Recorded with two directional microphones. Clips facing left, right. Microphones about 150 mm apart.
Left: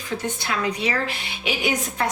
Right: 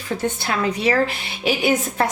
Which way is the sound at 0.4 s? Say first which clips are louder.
Right 5 dB; 40° right (ahead or behind).